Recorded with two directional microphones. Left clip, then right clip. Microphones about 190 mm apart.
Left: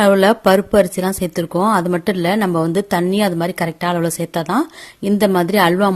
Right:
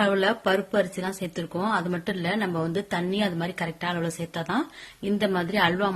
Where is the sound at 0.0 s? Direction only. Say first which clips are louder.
Left 11 dB; 45° left (ahead or behind).